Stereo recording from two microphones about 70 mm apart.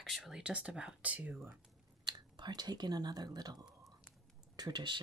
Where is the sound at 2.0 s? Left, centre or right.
Right.